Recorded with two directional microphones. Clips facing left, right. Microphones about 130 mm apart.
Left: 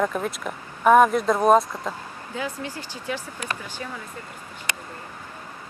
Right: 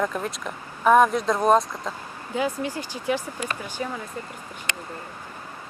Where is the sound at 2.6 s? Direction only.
15° right (ahead or behind).